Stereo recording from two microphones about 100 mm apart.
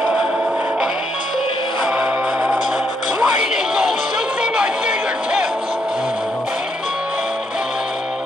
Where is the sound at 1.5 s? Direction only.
55° left (ahead or behind).